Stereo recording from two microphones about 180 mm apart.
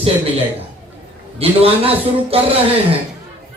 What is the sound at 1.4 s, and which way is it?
Music, 30° right (ahead or behind).